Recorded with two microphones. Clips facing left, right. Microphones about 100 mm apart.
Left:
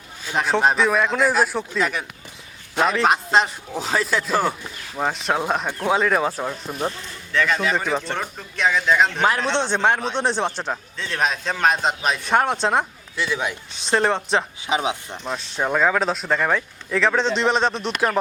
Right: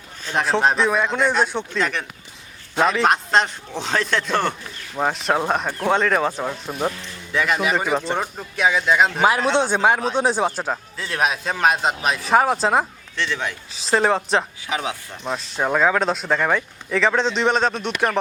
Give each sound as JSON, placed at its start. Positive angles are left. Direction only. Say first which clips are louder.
{"t": 0.3, "sound": "a man's voice", "louder": "even", "side_deg": 0}
{"t": 13.2, "sound": "speech", "louder": "left 1 dB", "side_deg": 15}
{"t": 13.7, "sound": "a man's voice", "louder": "right 2 dB", "side_deg": 0}
{"t": 14.7, "sound": "speech", "louder": "left 6 dB", "side_deg": 20}
{"t": 15.2, "sound": "a man's voice", "louder": "right 3 dB", "side_deg": 0}